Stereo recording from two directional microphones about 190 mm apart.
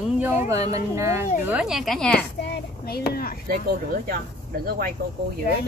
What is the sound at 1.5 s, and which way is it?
Speech, 5° right (ahead or behind).